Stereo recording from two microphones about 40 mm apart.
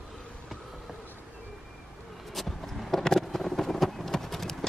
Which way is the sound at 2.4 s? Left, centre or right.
Centre.